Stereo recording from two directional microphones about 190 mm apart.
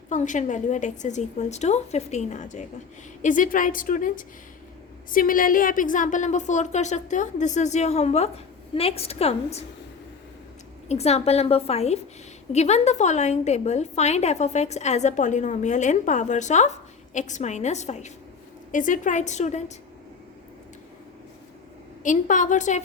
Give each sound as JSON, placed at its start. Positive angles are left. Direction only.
{"t": 0.1, "sound": "a woman's voice", "side_deg": 40}
{"t": 10.8, "sound": "a woman's voice", "side_deg": 35}
{"t": 22.0, "sound": "a woman's voice", "side_deg": 40}